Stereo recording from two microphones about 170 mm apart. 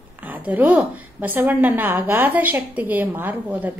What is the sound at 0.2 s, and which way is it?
A woman's voice, 10° right (ahead or behind).